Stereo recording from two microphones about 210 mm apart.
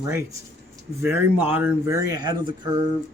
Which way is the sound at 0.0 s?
15° right (ahead or behind).